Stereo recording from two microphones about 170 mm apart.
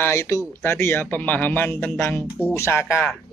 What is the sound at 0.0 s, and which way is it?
Speech, 15° left (ahead or behind).